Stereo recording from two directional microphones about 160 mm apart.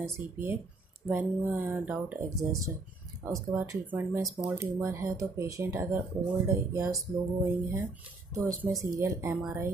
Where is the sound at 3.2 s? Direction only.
20° right (ahead or behind).